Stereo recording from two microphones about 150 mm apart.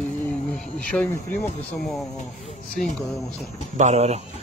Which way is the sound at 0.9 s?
10° left (ahead or behind).